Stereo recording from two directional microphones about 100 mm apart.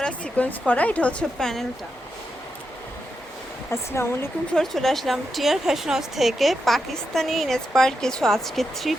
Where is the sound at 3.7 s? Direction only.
25° left (ahead or behind).